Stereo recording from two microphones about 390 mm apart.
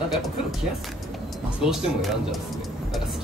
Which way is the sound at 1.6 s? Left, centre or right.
Centre.